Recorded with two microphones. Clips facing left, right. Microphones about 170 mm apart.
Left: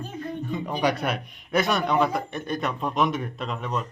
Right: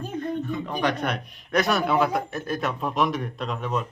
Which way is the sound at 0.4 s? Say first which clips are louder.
Left 1 dB; 15° left (ahead or behind).